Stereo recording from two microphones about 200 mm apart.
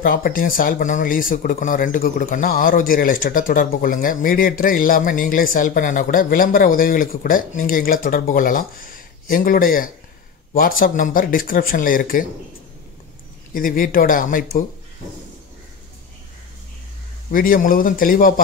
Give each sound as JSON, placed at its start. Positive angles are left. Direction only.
{"t": 0.0, "sound": "speech", "side_deg": 45}
{"t": 13.5, "sound": "speech", "side_deg": 45}
{"t": 17.3, "sound": "speech", "side_deg": 45}